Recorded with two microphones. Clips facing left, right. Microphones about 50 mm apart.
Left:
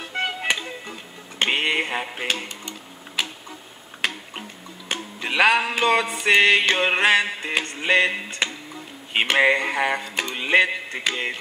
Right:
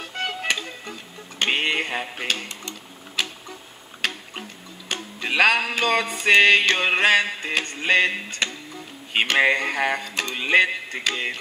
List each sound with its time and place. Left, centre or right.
0.0 s music: centre
1.4 s a sound: centre
2.2 s speech: centre
4.0 s music: centre
7.5 s speech: centre